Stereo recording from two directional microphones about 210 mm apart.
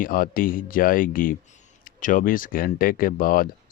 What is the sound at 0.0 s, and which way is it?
Speech, 40° left (ahead or behind).